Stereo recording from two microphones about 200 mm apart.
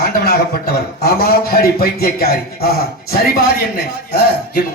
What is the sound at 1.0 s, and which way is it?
A man's voice, 50° left (ahead or behind).